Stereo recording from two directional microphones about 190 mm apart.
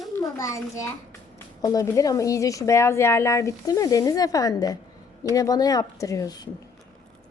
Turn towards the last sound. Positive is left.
turn(degrees=20)  # may be behind; listen again after turning